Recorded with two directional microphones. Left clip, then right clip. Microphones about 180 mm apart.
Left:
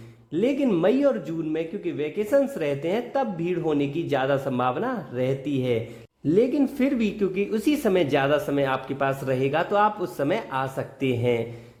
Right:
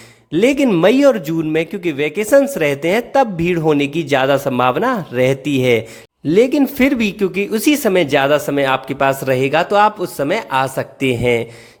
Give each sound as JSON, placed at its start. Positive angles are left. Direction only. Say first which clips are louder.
{"t": 0.3, "sound": "speech", "louder": "right 10 dB", "side_deg": -35}
{"t": 6.2, "sound": "speech", "louder": "right 8 dB", "side_deg": -25}